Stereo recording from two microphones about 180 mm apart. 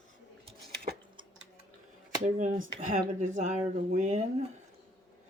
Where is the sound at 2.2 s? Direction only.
45° right (ahead or behind).